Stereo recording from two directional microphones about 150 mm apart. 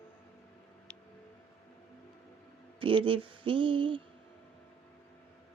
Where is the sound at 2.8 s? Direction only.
35° right (ahead or behind).